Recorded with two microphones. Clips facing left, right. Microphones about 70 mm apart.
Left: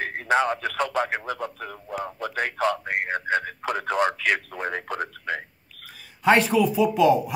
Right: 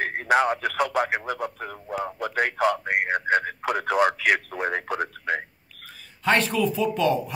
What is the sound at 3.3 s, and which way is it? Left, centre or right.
Radio, right.